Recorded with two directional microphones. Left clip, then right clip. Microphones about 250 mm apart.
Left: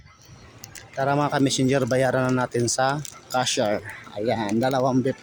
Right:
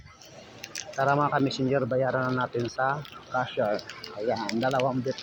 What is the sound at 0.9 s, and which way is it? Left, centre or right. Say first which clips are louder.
Speech: left 2 dB; left.